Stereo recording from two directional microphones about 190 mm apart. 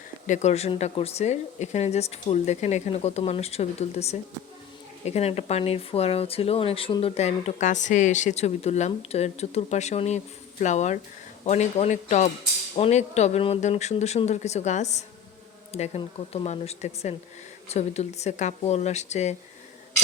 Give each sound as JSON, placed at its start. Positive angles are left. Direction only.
{"t": 0.3, "sound": "speech", "side_deg": 35}